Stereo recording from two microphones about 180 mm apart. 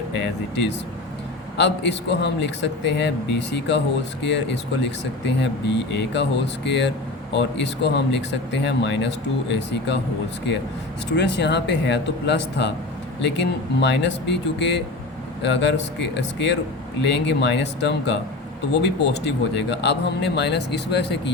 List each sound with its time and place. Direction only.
0.2 s speech: 75° left (ahead or behind)
11.2 s speech: 75° left (ahead or behind)